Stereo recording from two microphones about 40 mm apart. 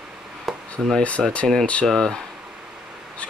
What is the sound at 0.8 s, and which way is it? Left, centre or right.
Speech, centre.